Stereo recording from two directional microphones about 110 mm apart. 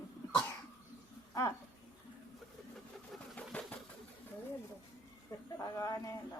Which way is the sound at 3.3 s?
15° left (ahead or behind).